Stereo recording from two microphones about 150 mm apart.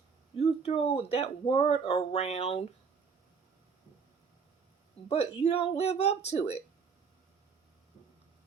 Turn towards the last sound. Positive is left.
turn(degrees=45)  # may be behind; listen again after turning